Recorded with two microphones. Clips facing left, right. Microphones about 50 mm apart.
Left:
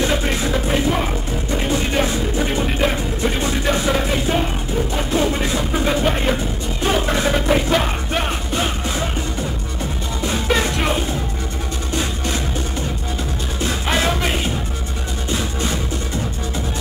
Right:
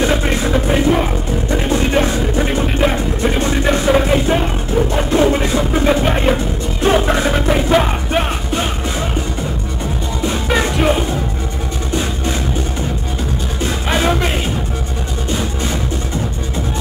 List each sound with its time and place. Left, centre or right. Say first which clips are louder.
0.0 s music: right 3 dB; centre
10.2 s music: right 2 dB; centre
13.8 s music: right 4 dB; centre